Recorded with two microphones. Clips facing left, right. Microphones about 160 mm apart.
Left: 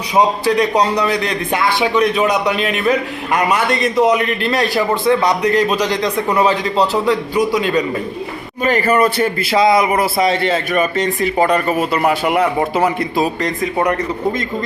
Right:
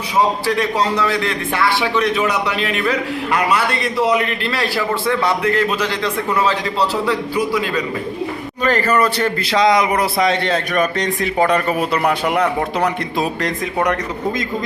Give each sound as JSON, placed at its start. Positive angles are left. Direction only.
{"t": 0.2, "sound": "a man's voice", "side_deg": 20}